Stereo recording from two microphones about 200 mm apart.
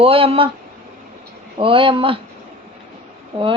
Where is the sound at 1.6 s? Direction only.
25° right (ahead or behind).